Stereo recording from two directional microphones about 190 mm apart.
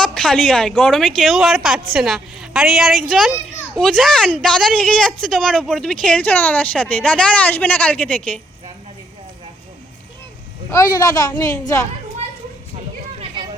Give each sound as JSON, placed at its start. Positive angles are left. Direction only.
{"t": 0.0, "sound": "speech", "side_deg": 5}
{"t": 10.7, "sound": "a woman's voice", "side_deg": 15}